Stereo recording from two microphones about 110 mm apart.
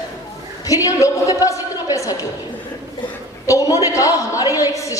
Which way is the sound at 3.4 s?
30° left (ahead or behind).